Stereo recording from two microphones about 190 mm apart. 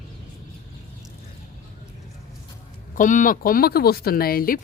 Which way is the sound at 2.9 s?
45° left (ahead or behind).